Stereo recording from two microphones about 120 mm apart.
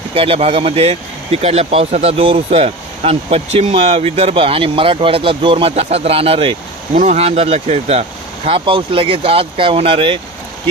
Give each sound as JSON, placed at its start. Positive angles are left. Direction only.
{"t": 0.1, "sound": "speech", "side_deg": -50}
{"t": 7.0, "sound": "speech", "side_deg": -70}
{"t": 8.5, "sound": "speech", "side_deg": -45}